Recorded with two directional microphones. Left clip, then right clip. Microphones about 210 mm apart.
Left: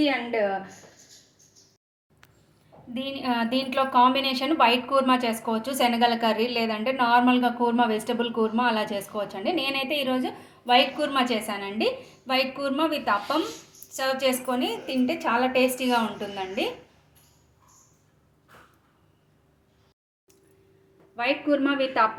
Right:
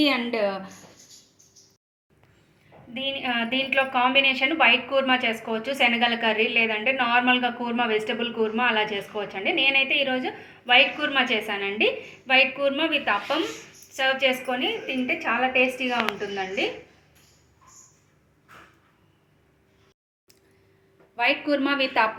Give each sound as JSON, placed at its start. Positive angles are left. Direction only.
{"t": 0.0, "sound": "a woman's voice", "side_deg": -30}
{"t": 2.9, "sound": "a woman's voice", "side_deg": 55}
{"t": 21.2, "sound": "a woman's voice", "side_deg": 35}